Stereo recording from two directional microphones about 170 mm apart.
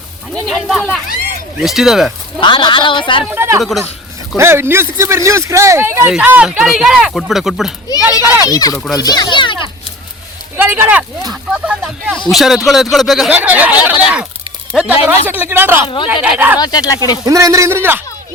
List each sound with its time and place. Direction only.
0.4 s a man's voice: centre (ahead or behind)
2.4 s a woman's voice: 30° left (ahead or behind)
3.2 s speech: 15° right (ahead or behind)
3.6 s a man's voice: centre (ahead or behind)
4.4 s speech: 15° right (ahead or behind)
7.9 s a woman's voice: 20° left (ahead or behind)
8.2 s speech: 15° right (ahead or behind)
8.4 s a woman's voice: 20° left (ahead or behind)
10.6 s a man's voice: 10° right (ahead or behind)
16.6 s a woman's voice: 25° left (ahead or behind)
17.2 s speech: 20° right (ahead or behind)